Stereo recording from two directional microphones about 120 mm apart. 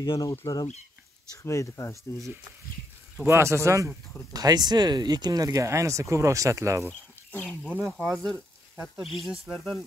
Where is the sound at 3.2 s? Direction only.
25° right (ahead or behind).